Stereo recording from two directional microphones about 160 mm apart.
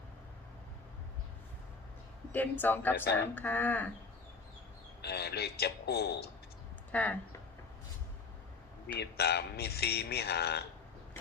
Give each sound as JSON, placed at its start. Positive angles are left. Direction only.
{"t": 2.3, "sound": "speech", "side_deg": 10}
{"t": 5.0, "sound": "a man's voice", "side_deg": 90}
{"t": 6.9, "sound": "speech", "side_deg": 10}
{"t": 9.0, "sound": "a man's voice", "side_deg": 90}